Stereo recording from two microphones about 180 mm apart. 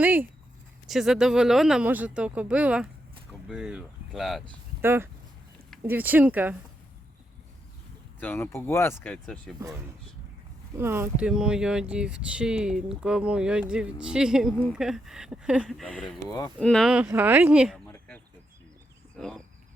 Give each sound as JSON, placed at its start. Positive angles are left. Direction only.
{"t": 0.0, "sound": "a sound", "side_deg": -10}
{"t": 0.9, "sound": "speech", "side_deg": 0}
{"t": 4.8, "sound": "speech", "side_deg": -15}
{"t": 8.2, "sound": "speech", "side_deg": 10}
{"t": 9.6, "sound": "speech", "side_deg": -15}
{"t": 17.8, "sound": "a sound", "side_deg": 15}